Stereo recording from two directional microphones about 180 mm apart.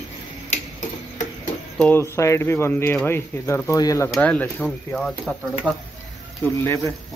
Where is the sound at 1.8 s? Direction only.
10° left (ahead or behind).